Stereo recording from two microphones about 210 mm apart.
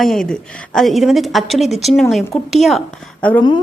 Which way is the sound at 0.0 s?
Centre (ahead or behind).